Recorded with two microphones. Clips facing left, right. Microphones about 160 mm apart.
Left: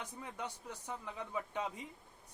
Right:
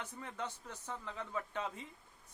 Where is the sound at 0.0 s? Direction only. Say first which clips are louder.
Right 1 dB; 15° left (ahead or behind).